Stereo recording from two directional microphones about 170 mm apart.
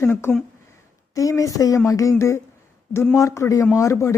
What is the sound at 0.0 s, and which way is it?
A man's voice, 15° left (ahead or behind).